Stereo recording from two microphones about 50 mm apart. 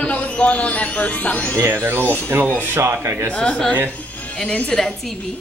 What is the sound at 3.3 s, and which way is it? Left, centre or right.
A woman's voice, centre.